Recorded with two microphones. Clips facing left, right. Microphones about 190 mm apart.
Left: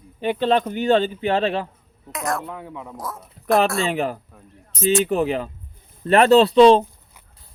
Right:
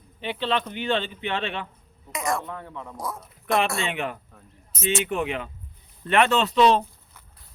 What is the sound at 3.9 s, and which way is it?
Speech, 35° left (ahead or behind).